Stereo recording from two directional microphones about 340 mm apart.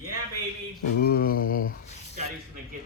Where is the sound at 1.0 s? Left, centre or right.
Left.